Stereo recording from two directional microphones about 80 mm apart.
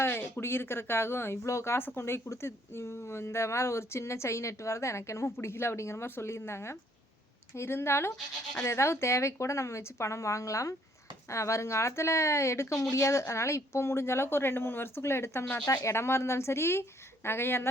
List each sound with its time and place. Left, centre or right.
0.0 s speech: left
15.6 s speech: left